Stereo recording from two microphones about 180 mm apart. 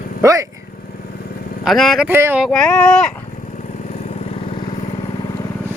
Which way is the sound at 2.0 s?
10° right (ahead or behind).